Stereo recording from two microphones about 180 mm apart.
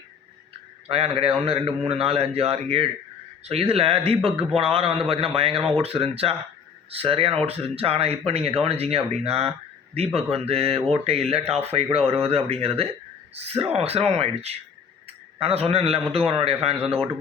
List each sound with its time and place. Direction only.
0.9 s a man's voice: 30° right (ahead or behind)